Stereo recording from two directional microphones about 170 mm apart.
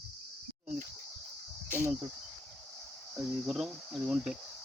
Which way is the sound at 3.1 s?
5° right (ahead or behind).